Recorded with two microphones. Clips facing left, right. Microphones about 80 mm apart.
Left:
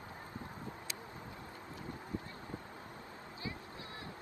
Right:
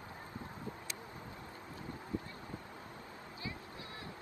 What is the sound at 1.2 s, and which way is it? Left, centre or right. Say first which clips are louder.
Wind: even; right.